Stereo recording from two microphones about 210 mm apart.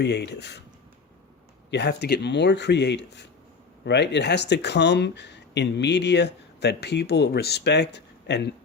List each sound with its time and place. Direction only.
0.0 s speech: 50° left (ahead or behind)
1.7 s speech: 55° left (ahead or behind)